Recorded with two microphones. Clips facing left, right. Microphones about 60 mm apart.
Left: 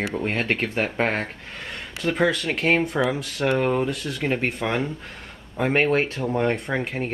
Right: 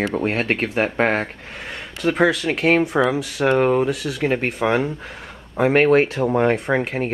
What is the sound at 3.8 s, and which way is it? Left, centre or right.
Speech, right.